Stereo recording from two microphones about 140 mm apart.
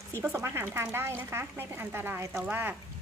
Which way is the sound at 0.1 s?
20° right (ahead or behind).